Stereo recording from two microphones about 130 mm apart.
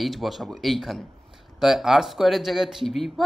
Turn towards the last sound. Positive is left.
turn(degrees=0)  # may be behind; listen again after turning